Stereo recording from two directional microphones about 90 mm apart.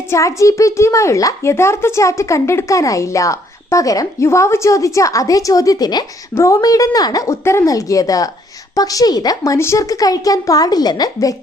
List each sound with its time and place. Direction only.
0.1 s a child's voice: 35° left (ahead or behind)
6.3 s a child's voice: 35° left (ahead or behind)